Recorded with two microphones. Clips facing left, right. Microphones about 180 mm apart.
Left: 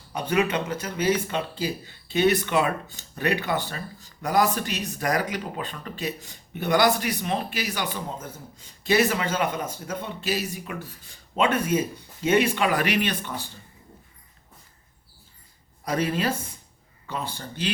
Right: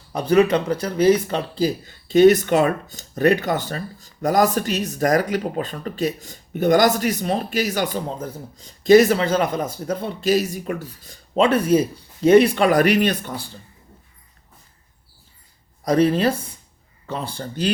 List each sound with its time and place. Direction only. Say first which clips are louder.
0.1 s speech: right 8 dB; 35° right (ahead or behind)
15.8 s speech: right 8 dB; 35° right (ahead or behind)